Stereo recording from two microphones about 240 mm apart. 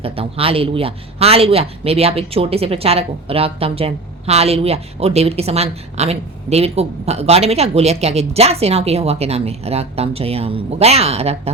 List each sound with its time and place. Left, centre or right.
0.0 s speech: right